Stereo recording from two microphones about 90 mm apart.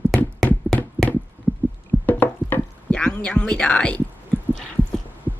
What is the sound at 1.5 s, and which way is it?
Heart sounds, 15° left (ahead or behind).